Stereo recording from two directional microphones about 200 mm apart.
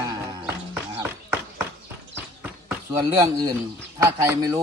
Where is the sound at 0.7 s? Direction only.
10° right (ahead or behind).